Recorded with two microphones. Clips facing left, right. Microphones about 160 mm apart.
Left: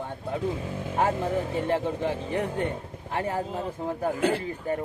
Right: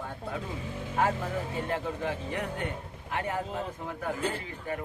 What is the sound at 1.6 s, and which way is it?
Speech, 30° left (ahead or behind).